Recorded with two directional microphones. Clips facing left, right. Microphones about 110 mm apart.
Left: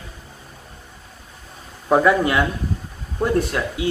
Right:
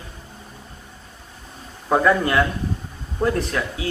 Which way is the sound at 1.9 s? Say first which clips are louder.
Left 2 dB; 10° left (ahead or behind).